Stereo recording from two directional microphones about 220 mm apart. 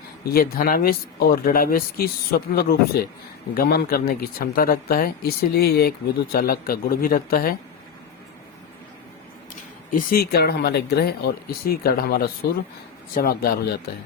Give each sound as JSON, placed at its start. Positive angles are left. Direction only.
{"t": 0.3, "sound": "speech", "side_deg": 45}
{"t": 9.9, "sound": "speech", "side_deg": 40}